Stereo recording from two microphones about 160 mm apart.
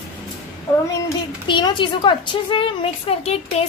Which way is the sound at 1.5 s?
30° left (ahead or behind).